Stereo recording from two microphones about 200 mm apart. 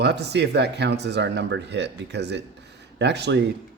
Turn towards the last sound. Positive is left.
turn(degrees=-60)  # may be behind; listen again after turning